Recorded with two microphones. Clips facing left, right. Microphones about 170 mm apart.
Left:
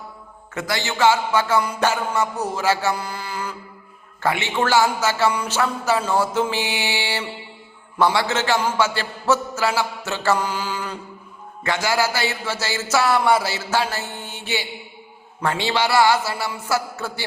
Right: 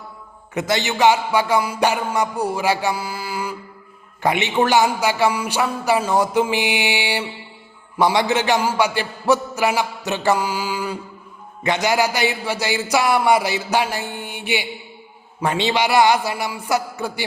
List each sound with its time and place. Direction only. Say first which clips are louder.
0.5 s a man's voice: right 4 dB; 20° right (ahead or behind)